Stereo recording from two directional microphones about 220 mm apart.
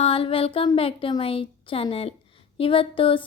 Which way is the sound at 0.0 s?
25° left (ahead or behind).